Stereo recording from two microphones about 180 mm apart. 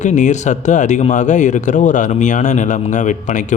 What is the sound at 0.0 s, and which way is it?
Speech, 40° left (ahead or behind).